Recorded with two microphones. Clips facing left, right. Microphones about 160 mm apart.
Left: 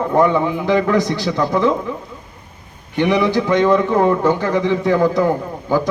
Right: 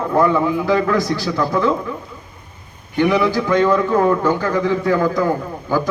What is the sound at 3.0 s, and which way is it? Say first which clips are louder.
A man's voice: even; 15° left (ahead or behind).